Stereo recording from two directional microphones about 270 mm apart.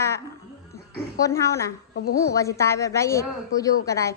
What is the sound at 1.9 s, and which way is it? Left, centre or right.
Speech, left.